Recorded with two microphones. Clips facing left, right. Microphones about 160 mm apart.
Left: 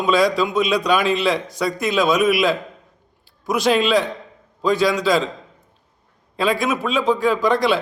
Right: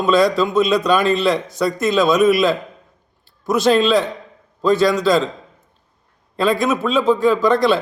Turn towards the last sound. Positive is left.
turn(degrees=10)  # may be behind; listen again after turning